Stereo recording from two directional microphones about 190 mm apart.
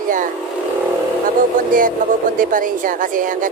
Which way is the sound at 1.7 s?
45° right (ahead or behind).